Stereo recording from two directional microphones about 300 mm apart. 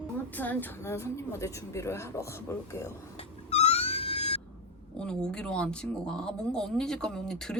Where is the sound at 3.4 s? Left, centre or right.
Left.